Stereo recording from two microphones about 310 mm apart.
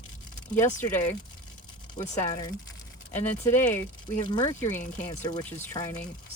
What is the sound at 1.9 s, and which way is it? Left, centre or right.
Speech, centre.